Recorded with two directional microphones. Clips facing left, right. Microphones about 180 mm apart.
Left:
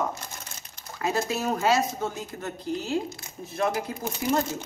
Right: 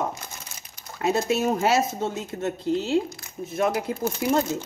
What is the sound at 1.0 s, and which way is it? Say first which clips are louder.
Speech: right 4 dB; 20° right (ahead or behind).